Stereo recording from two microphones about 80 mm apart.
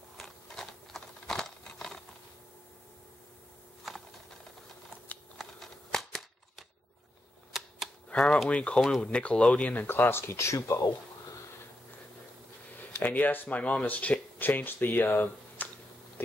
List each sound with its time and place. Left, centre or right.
0.2 s a sound: centre
3.9 s a sound: centre
5.4 s scissors: centre
7.5 s typewriter: centre
8.1 s speech: centre; by 10.9 s left
13.0 s speech: centre